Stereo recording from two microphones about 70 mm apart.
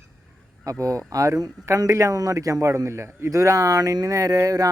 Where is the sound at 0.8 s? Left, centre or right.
Right.